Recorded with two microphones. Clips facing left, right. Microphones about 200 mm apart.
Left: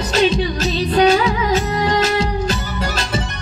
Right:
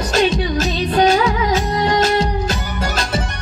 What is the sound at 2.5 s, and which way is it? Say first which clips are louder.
Music: even; 50° right (ahead or behind).